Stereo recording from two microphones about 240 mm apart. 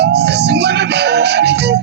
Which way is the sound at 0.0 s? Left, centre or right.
Right.